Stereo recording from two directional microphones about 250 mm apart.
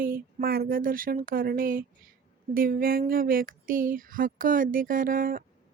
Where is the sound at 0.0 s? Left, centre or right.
Right.